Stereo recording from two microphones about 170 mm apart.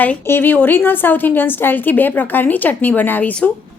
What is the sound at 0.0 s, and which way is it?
A woman's voice, 10° left (ahead or behind).